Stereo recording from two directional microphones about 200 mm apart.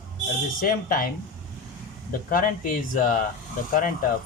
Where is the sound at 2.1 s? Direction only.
45° left (ahead or behind).